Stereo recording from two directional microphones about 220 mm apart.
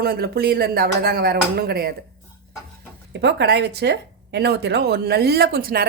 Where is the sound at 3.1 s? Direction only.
50° right (ahead or behind).